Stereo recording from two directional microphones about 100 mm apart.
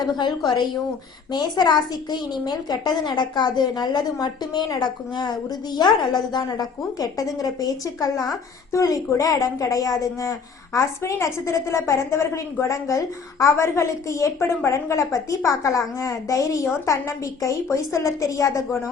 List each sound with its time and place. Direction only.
0.0 s a woman's voice: 50° left (ahead or behind); by 18.8 s 30° left (ahead or behind)